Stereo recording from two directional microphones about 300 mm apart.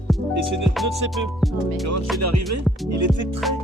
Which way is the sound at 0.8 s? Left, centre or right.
Right.